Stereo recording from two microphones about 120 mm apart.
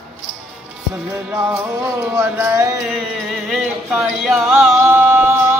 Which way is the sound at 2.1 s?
20° right (ahead or behind).